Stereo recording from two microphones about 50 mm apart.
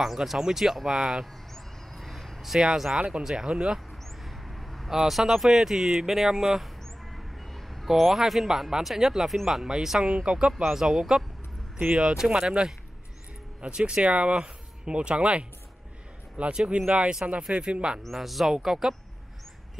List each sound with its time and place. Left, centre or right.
0.0 s speech: centre
1.2 s a sound: centre
3.0 s speech: centre
4.2 s a sound: centre
4.9 s speech: centre
10.6 s speech: centre
18.0 s speech: centre